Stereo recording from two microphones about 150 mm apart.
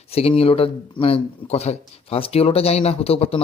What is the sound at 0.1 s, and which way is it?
Speech, 40° left (ahead or behind).